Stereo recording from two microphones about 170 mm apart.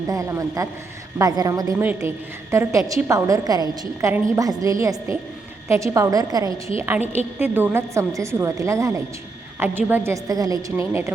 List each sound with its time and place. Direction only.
0.1 s a woman's voice: 20° right (ahead or behind)
7.0 s a woman's voice: 40° left (ahead or behind)
7.3 s a woman's voice: 10° right (ahead or behind)